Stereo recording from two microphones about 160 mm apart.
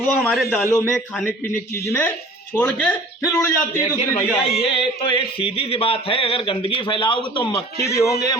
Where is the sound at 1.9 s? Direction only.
15° left (ahead or behind).